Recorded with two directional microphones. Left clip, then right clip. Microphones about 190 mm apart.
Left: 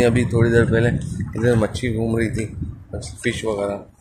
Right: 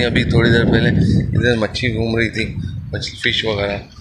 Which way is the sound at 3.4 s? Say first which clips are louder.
Right 4 dB; 15° left (ahead or behind).